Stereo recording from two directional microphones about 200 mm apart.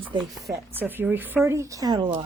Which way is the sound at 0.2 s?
Centre (ahead or behind).